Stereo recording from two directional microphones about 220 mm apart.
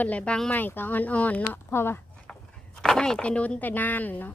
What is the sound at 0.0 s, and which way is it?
Speech, 5° left (ahead or behind).